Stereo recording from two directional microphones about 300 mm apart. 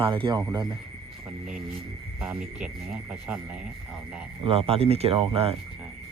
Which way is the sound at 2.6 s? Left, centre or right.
Centre.